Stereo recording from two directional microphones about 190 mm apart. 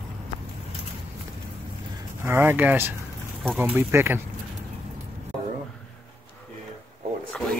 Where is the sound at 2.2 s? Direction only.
10° right (ahead or behind).